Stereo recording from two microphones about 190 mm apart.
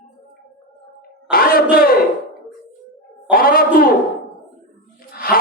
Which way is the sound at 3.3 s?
50° left (ahead or behind).